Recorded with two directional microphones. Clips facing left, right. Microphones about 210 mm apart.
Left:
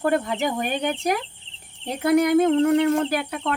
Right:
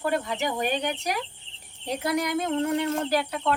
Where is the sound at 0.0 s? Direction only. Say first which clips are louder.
Left 5 dB; 50° left (ahead or behind).